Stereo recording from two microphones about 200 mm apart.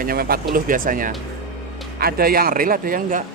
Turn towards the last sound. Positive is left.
turn(degrees=-45)  # may be behind; listen again after turning